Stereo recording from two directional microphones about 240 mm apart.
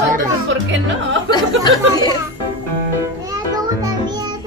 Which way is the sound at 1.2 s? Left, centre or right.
Centre.